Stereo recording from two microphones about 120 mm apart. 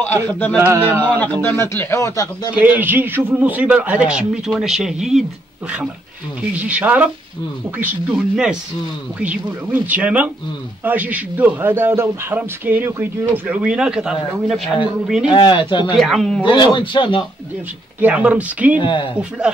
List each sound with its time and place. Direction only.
0.0 s speech: 15° left (ahead or behind)
0.6 s a man's voice: 15° right (ahead or behind)
1.2 s speech: 20° left (ahead or behind)
2.5 s a man's voice: 15° right (ahead or behind)
6.6 s a man's voice: 15° right (ahead or behind)
15.2 s speech: 40° left (ahead or behind)
16.0 s a man's voice: centre (ahead or behind)
16.4 s a man's voice: 40° left (ahead or behind)
18.0 s a man's voice: 10° right (ahead or behind)
18.8 s speech: 40° left (ahead or behind)